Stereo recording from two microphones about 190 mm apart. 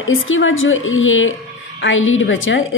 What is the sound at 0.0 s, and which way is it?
A woman's voice, 90° left.